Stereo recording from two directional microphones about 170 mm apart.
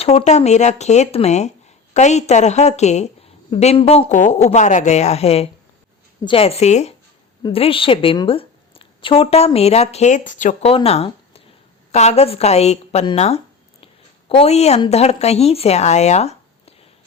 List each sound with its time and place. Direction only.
0.0 s a woman's voice: 35° left (ahead or behind)
10.7 s a woman's voice: 35° left (ahead or behind)